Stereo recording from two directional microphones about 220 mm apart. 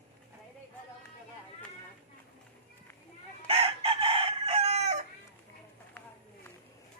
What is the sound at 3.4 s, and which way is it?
Chicken, 25° right (ahead or behind).